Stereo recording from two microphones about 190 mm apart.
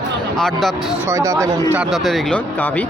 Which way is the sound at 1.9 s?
Centre (ahead or behind).